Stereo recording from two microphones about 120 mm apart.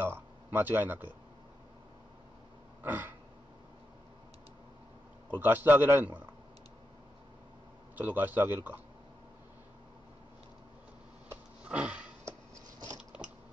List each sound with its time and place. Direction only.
0.0 s a sound: 15° right (ahead or behind)
2.8 s throat clearing: 15° right (ahead or behind)
5.4 s a man's voice: 15° right (ahead or behind)
7.9 s a man's voice: 15° right (ahead or behind)
11.6 s sniff: 10° right (ahead or behind)